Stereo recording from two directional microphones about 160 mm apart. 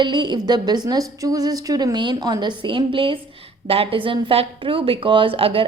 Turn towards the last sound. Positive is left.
turn(degrees=-35)  # may be behind; listen again after turning